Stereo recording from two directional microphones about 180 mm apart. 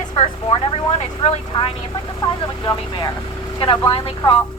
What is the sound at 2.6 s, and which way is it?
A woman's voice, 25° left (ahead or behind).